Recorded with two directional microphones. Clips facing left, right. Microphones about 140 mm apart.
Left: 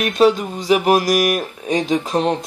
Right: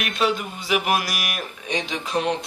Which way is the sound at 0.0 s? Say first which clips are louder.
Left 9 dB; 40° left (ahead or behind).